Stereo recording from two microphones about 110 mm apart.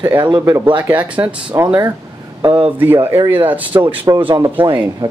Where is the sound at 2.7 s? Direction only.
20° right (ahead or behind).